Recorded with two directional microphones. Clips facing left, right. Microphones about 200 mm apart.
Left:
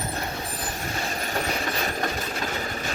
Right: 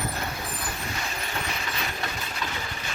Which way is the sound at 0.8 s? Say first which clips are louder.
Left 4 dB; 40° left (ahead or behind).